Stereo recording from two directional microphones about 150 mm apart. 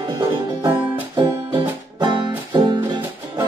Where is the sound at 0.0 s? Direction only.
30° right (ahead or behind).